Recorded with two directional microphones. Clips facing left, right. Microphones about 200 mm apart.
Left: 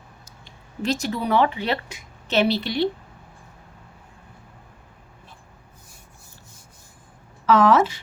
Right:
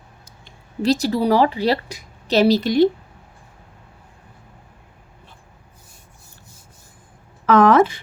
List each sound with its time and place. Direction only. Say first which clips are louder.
0.8 s a woman's voice: right 7 dB; 35° right (ahead or behind)
7.4 s a woman's voice: right 3 dB; 55° right (ahead or behind)